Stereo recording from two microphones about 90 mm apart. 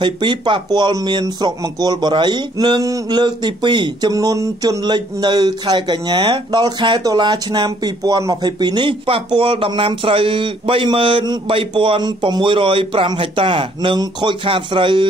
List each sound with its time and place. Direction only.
0.0 s speech: 60° right (ahead or behind)
4.1 s speech: 40° right (ahead or behind); by 13.9 s 75° right (ahead or behind)
13.9 s speech: 65° right (ahead or behind)